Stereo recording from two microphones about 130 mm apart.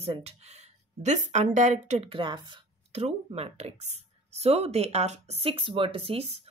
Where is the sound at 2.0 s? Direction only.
35° right (ahead or behind).